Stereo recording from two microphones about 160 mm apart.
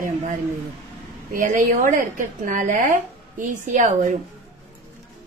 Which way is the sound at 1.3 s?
60° right (ahead or behind).